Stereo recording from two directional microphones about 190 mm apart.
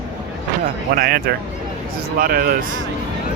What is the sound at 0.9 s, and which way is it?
Speech, 55° right (ahead or behind).